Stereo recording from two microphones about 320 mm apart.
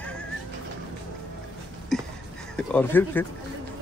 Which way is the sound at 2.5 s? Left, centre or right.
Centre.